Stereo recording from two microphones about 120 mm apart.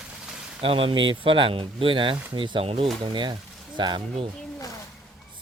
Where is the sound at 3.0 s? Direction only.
40° right (ahead or behind).